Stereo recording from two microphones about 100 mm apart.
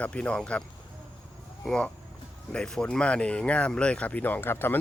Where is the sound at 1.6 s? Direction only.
5° left (ahead or behind).